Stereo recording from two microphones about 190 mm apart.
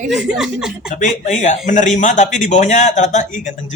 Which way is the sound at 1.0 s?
40° left (ahead or behind).